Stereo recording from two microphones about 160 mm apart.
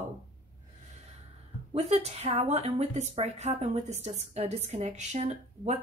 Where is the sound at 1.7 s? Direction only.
40° right (ahead or behind).